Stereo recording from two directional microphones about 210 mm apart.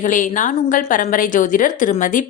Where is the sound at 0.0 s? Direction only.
35° left (ahead or behind).